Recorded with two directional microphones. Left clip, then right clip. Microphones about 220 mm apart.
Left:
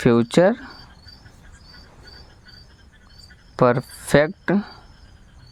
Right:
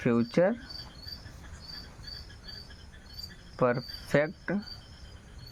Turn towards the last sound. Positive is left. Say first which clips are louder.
# left 10 dB
turn(degrees=40)  # may be behind; listen again after turning